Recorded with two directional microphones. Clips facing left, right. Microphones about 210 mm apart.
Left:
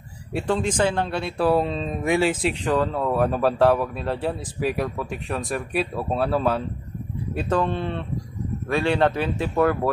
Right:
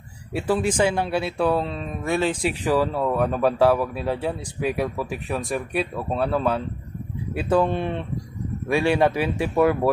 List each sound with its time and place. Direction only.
0.3 s speech: 5° right (ahead or behind)
1.5 s speech: 15° left (ahead or behind)
2.4 s speech: 5° right (ahead or behind)
7.3 s speech: 10° right (ahead or behind)